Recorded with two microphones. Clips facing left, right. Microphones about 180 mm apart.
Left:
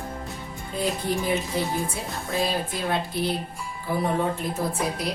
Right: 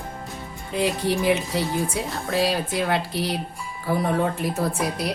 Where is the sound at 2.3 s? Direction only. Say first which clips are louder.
Right 3 dB; 80° right.